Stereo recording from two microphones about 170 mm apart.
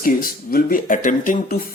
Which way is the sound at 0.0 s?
55° left (ahead or behind).